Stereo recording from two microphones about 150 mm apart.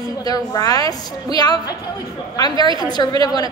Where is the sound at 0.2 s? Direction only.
25° left (ahead or behind).